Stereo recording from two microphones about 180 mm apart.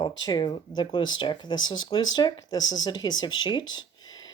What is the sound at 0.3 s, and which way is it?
Speech, 20° left (ahead or behind).